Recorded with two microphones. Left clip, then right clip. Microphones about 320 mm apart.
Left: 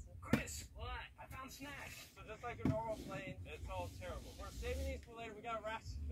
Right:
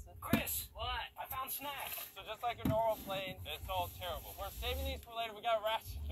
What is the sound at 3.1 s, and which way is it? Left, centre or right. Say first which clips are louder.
Speech: right 7 dB; right.